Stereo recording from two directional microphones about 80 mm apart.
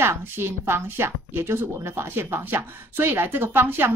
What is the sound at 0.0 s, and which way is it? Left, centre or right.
A woman's voice, right.